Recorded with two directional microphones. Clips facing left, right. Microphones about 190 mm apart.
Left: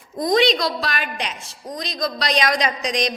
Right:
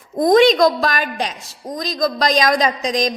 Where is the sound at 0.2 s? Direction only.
50° right (ahead or behind).